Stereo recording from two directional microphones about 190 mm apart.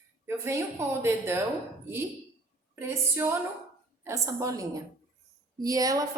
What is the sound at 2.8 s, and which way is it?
A woman's voice, 15° right (ahead or behind).